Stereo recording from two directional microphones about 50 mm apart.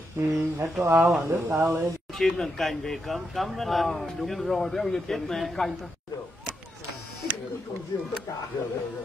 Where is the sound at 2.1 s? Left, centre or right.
Centre.